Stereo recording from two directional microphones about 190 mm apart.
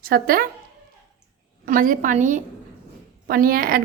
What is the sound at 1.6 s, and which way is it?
Speech, 45° right (ahead or behind).